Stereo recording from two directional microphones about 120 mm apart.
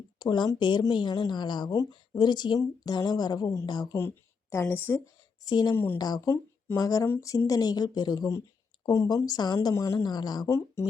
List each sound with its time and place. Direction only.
0.2 s a woman's voice: 35° left (ahead or behind); by 5.0 s 20° left (ahead or behind)
5.5 s a woman's voice: 35° left (ahead or behind)
5.7 s speech: 20° left (ahead or behind)
6.0 s a woman's voice: 35° left (ahead or behind)